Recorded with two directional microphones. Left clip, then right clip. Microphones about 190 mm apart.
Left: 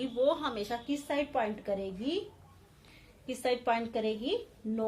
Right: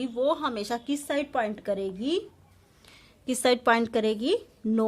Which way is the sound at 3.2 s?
50° right (ahead or behind).